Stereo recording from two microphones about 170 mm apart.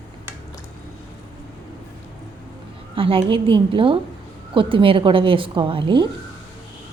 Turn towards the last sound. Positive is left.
turn(degrees=-30)  # may be behind; listen again after turning